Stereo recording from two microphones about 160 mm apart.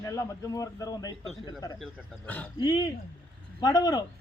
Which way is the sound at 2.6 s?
25° left (ahead or behind).